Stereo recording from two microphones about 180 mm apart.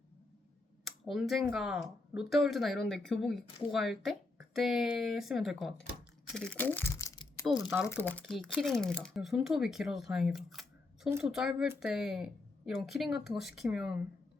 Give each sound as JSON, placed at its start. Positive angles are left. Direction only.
{"t": 0.9, "sound": "speech", "side_deg": 0}
{"t": 6.9, "sound": "crumpling", "side_deg": 20}
{"t": 7.9, "sound": "speech", "side_deg": 10}